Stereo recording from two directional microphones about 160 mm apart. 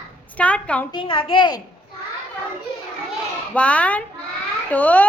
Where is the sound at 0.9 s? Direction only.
30° left (ahead or behind).